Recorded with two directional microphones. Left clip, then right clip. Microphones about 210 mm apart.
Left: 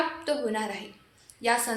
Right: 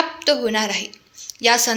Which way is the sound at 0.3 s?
40° right (ahead or behind).